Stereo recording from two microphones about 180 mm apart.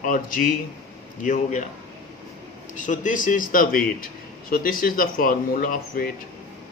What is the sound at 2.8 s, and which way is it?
Speech, 45° left (ahead or behind).